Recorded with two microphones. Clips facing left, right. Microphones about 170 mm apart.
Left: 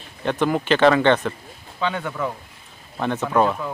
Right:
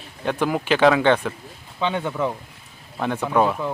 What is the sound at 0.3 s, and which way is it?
Speech, 5° right (ahead or behind).